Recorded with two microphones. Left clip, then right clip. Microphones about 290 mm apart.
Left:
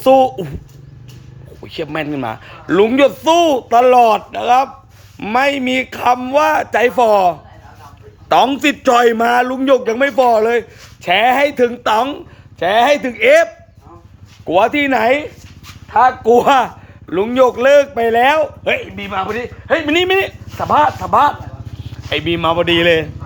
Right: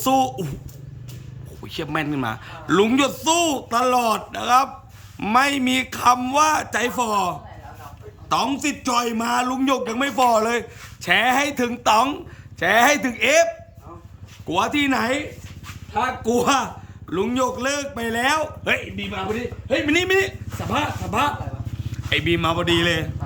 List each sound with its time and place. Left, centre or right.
0.0 s a man's voice: centre
1.6 s a man's voice: centre
22.1 s a man's voice: centre